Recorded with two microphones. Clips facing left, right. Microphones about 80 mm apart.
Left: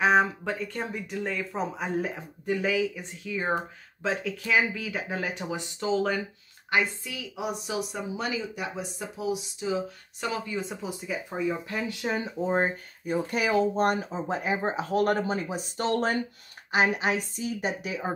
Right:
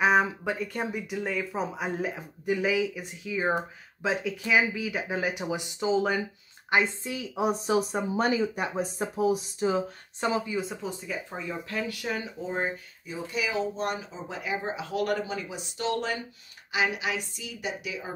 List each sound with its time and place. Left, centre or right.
0.0 s speech: centre
6.7 s a woman's voice: right
10.4 s speech: centre; by 12.3 s left
12.4 s speech: left
13.0 s speech: left